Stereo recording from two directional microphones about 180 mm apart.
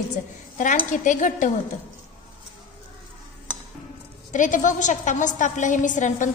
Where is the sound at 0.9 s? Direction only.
45° left (ahead or behind).